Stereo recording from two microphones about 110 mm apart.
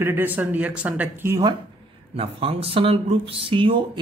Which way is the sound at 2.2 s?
60° right (ahead or behind).